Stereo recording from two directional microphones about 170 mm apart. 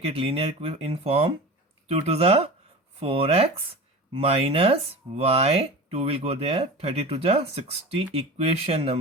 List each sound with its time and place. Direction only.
0.0 s speech: 35° right (ahead or behind)